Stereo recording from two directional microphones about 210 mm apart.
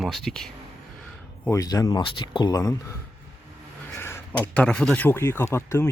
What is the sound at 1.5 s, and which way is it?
Speech, 15° left (ahead or behind).